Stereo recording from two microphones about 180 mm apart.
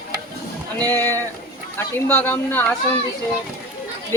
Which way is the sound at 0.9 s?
10° left (ahead or behind).